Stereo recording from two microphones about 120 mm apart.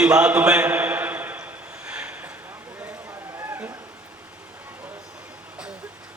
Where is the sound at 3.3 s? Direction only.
20° right (ahead or behind).